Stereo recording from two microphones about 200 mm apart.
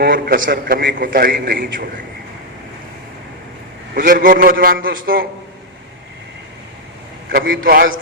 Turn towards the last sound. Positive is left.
turn(degrees=-50)  # may be behind; listen again after turning